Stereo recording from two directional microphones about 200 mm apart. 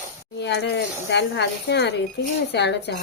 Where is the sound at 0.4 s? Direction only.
60° left (ahead or behind).